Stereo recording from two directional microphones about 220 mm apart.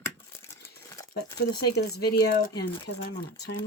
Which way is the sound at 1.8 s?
45° left (ahead or behind).